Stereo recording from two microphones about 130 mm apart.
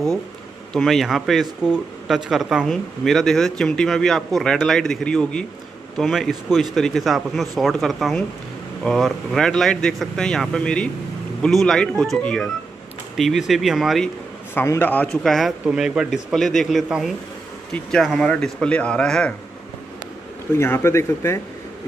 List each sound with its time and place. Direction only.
0.7 s speech: centre (ahead or behind)
14.5 s speech: 15° left (ahead or behind)
20.5 s speech: 20° left (ahead or behind)